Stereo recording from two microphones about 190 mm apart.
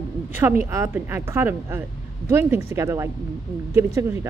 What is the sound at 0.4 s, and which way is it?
Speech, 10° right (ahead or behind).